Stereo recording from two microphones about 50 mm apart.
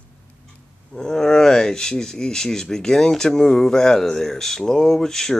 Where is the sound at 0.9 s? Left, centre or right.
Centre.